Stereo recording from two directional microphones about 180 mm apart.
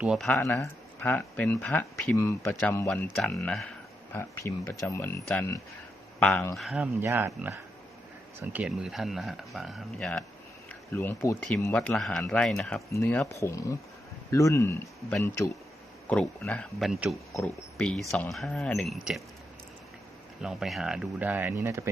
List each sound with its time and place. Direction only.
0.0 s speech: 5° right (ahead or behind)
0.3 s speech: 10° left (ahead or behind)
4.1 s speech: 15° left (ahead or behind)
6.6 s speech: centre (ahead or behind)
7.0 s speech: 15° right (ahead or behind)
20.4 s speech: centre (ahead or behind)